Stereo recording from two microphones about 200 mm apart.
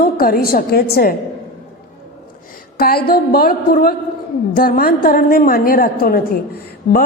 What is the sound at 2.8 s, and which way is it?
A woman's voice, 50° left (ahead or behind).